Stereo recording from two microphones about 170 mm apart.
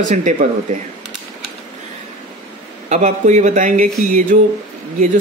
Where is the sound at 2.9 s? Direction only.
40° right (ahead or behind).